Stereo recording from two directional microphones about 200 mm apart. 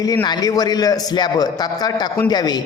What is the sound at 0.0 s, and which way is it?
A man's voice, 20° left (ahead or behind).